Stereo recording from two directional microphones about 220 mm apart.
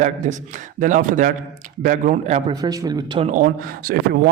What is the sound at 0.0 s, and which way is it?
A man's voice, 35° right (ahead or behind).